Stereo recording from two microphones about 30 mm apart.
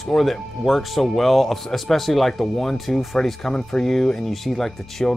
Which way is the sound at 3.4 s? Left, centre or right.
Left.